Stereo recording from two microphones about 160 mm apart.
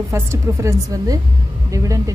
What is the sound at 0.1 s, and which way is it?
A woman's voice, 20° right (ahead or behind).